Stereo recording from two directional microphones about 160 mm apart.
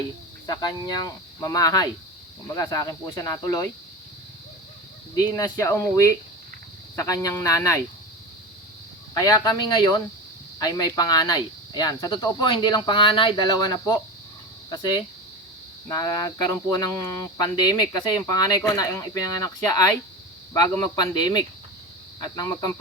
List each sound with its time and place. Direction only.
0.4 s speech: 25° left (ahead or behind)
5.3 s speech: 20° left (ahead or behind)
9.1 s speech: 20° left (ahead or behind)